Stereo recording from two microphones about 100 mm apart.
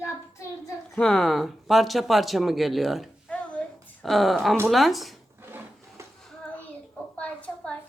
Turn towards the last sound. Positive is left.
turn(degrees=10)  # may be behind; listen again after turning